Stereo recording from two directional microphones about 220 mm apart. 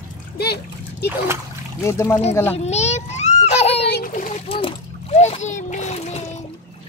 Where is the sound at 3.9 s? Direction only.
40° left (ahead or behind).